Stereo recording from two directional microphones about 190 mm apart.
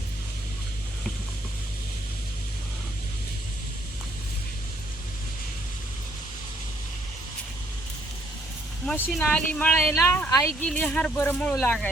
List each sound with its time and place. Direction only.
8.9 s speech: 5° left (ahead or behind)
10.6 s speech: 5° left (ahead or behind)